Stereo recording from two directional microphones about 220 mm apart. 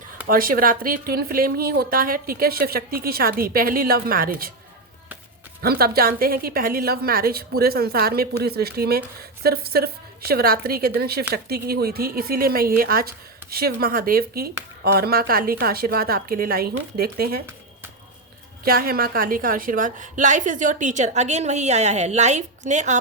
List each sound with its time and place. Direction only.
0.3 s a woman's voice: 40° right (ahead or behind)
5.6 s a woman's voice: 45° right (ahead or behind)
18.6 s a woman's voice: 40° right (ahead or behind)